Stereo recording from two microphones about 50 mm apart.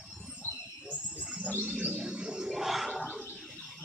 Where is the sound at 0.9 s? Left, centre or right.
Right.